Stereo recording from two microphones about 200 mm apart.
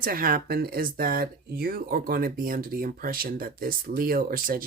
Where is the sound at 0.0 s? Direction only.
45° right (ahead or behind).